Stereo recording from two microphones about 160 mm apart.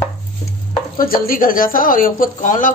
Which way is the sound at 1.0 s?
65° left (ahead or behind).